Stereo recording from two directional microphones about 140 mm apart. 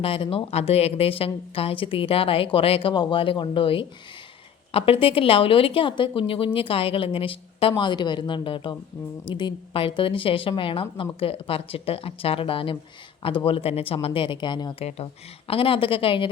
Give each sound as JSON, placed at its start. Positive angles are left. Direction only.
{"t": 0.0, "sound": "speech", "side_deg": 40}